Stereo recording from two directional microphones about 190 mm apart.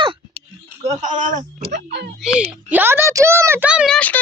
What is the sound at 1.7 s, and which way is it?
Speech, 60° right (ahead or behind).